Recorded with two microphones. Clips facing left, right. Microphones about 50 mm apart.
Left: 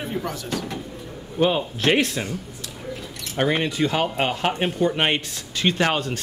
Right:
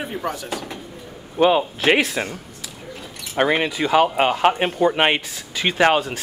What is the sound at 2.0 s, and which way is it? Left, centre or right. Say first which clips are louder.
Speech: right 2 dB; centre.